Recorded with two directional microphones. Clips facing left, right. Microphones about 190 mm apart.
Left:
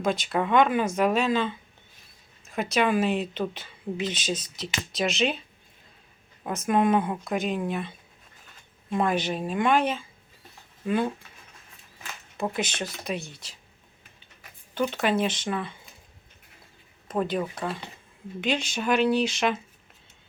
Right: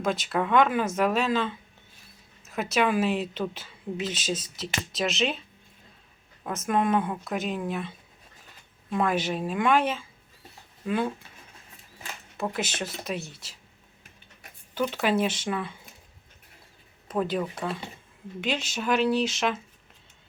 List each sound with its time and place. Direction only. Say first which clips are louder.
0.0 s speech: left 1 dB; centre (ahead or behind)
6.5 s speech: left 2 dB; centre (ahead or behind)
12.4 s speech: left 1 dB; 5° right (ahead or behind)
14.8 s speech: even; 5° right (ahead or behind)
17.1 s speech: even; centre (ahead or behind)